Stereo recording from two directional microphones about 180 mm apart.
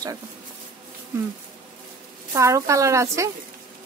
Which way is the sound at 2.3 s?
15° right (ahead or behind).